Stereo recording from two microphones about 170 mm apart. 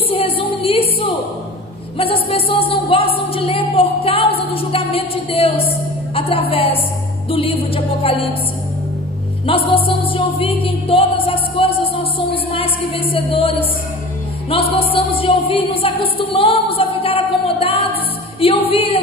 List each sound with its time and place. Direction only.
0.1 s a sound: 30° left (ahead or behind)
2.0 s a woman's voice: 35° left (ahead or behind)
6.1 s music: 35° left (ahead or behind)
9.7 s music: 30° left (ahead or behind)
14.5 s a sound: 35° left (ahead or behind)
18.4 s music: 35° left (ahead or behind)